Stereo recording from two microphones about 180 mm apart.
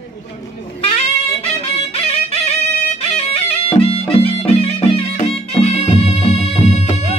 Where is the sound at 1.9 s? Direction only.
35° left (ahead or behind).